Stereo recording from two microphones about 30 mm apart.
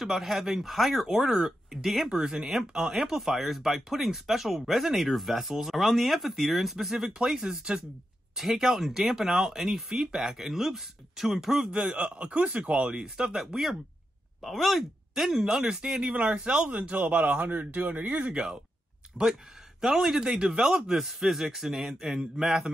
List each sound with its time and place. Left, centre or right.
0.0 s speech: centre
7.4 s speech: right
8.4 s speech: centre
9.8 s speech: centre
11.7 s a man's voice: right
12.8 s speech: right
14.4 s speech: centre
15.2 s a man's voice: centre; by 16.9 s right
16.9 s speech: right
17.2 s a man's voice: right
19.8 s speech: centre
20.9 s speech: centre